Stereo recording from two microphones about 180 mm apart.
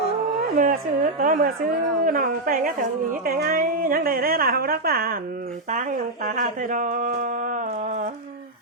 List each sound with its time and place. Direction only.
0.5 s a woman's voice: 45° right (ahead or behind)